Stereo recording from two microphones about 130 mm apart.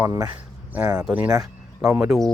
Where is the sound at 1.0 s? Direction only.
15° right (ahead or behind).